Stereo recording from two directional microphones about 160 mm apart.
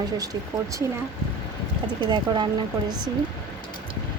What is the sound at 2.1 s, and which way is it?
Speech, 25° right (ahead or behind).